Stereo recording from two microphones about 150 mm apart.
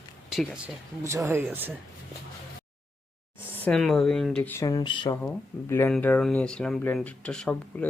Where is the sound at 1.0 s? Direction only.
20° right (ahead or behind).